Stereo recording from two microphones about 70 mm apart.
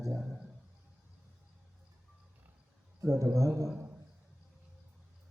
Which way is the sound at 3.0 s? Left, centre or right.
Right.